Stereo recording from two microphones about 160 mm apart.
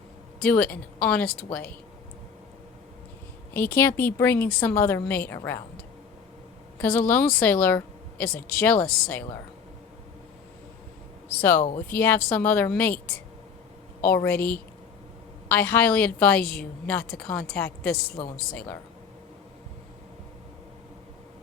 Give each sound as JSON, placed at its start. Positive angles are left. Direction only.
{"t": 0.4, "sound": "speech", "side_deg": 10}
{"t": 3.5, "sound": "speech", "side_deg": 10}
{"t": 6.7, "sound": "speech", "side_deg": 10}
{"t": 11.3, "sound": "speech", "side_deg": 15}
{"t": 14.0, "sound": "speech", "side_deg": 10}